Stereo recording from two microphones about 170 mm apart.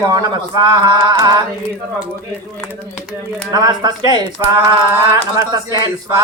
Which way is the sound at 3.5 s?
25° right (ahead or behind).